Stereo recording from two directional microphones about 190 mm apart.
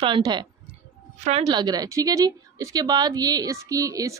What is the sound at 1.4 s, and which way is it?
A woman's voice, 20° right (ahead or behind).